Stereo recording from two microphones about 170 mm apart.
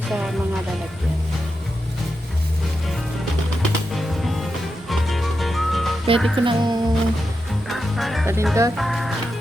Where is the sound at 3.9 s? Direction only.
Centre (ahead or behind).